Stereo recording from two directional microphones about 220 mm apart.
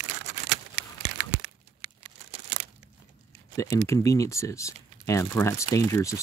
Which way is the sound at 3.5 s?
15° left (ahead or behind).